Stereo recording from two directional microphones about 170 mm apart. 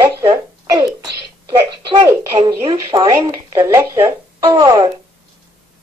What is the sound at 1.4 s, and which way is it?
A woman's voice, 25° right (ahead or behind).